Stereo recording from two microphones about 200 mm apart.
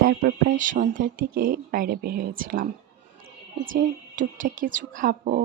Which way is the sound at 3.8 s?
40° right (ahead or behind).